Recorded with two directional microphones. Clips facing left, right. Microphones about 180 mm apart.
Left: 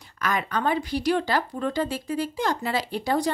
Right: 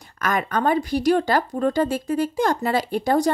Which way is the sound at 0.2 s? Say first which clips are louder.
Right 4 dB; 45° right (ahead or behind).